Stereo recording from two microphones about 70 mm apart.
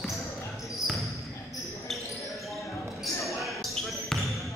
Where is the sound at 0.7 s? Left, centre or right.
Centre.